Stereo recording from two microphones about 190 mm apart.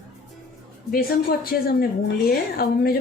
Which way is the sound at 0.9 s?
50° left (ahead or behind).